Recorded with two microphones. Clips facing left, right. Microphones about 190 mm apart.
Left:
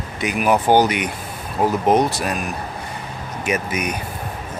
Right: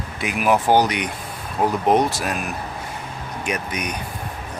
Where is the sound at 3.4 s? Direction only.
5° left (ahead or behind).